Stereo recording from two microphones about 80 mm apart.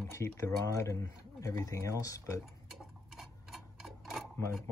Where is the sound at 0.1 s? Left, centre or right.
Left.